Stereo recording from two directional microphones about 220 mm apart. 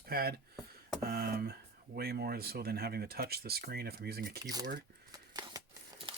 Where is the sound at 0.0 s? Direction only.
45° right (ahead or behind).